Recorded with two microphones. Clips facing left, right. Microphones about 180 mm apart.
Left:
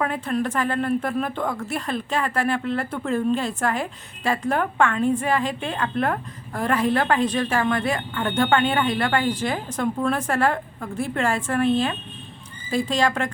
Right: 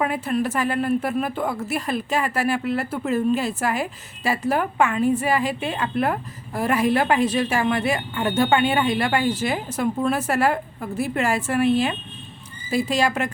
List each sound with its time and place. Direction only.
0.0 s a woman's voice: 10° right (ahead or behind)